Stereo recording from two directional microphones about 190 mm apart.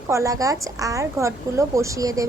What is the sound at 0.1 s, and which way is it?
A woman's voice, 15° right (ahead or behind).